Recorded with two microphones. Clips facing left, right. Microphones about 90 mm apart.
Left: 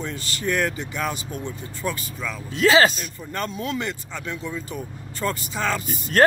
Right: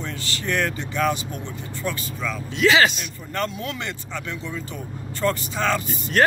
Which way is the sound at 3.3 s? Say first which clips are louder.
Right 1 dB; 25° left (ahead or behind).